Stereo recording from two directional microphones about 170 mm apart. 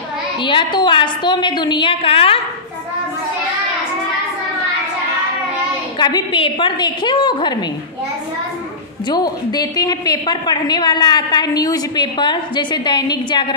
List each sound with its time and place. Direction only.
0.4 s a woman's voice: 30° left (ahead or behind)
5.9 s a woman's voice: 25° left (ahead or behind)
9.0 s a woman's voice: 25° left (ahead or behind)